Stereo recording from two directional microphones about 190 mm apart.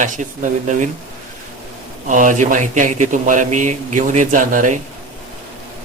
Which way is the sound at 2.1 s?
40° right (ahead or behind).